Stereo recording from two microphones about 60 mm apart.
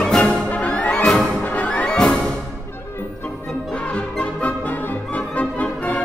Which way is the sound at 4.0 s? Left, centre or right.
Left.